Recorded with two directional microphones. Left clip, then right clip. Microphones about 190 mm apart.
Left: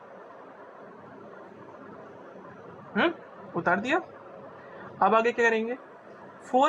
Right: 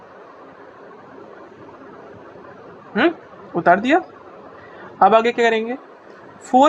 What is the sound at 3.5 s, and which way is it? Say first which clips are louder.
A woman's voice: right 11 dB; 35° right (ahead or behind).